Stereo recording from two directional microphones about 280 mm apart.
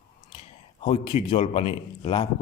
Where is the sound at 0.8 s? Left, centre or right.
Left.